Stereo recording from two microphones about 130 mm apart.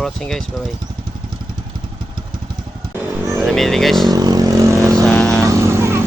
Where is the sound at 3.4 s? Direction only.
Centre (ahead or behind).